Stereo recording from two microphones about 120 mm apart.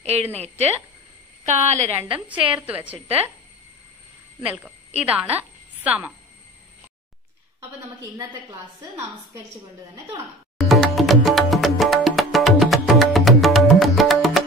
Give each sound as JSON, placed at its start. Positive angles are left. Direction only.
{"t": 0.0, "sound": "a woman's voice", "side_deg": -60}
{"t": 1.4, "sound": "speech", "side_deg": -75}
{"t": 2.1, "sound": "a woman's voice", "side_deg": -10}
{"t": 4.4, "sound": "a woman's voice", "side_deg": -10}
{"t": 10.6, "sound": "music", "side_deg": 0}